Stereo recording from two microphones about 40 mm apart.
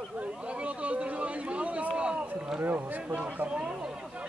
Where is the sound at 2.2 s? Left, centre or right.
Right.